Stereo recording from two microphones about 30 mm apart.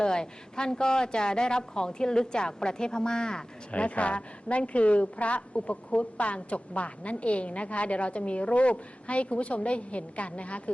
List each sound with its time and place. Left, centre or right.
0.0 s a woman's voice: left
3.7 s a woman's voice: left